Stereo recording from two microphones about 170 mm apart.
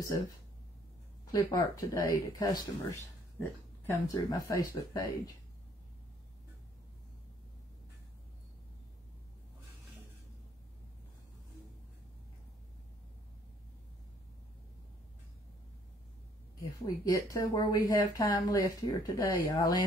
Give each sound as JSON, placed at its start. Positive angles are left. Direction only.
{"t": 0.0, "sound": "speech", "side_deg": 20}
{"t": 16.8, "sound": "speech", "side_deg": 20}